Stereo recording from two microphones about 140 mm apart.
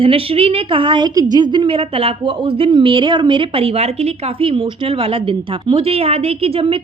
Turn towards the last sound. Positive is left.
turn(degrees=-40)  # may be behind; listen again after turning